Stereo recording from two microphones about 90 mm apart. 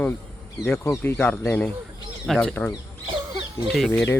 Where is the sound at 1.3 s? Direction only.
15° left (ahead or behind).